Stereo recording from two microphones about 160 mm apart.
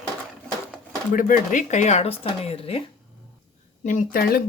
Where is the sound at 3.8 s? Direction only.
55° left (ahead or behind).